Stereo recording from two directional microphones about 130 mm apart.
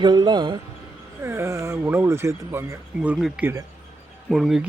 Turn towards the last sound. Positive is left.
turn(degrees=0)  # may be behind; listen again after turning